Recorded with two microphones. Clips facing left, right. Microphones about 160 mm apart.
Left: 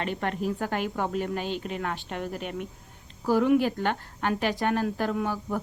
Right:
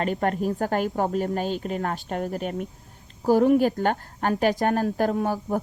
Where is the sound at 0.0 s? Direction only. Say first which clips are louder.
Right 5 dB; 45° right (ahead or behind).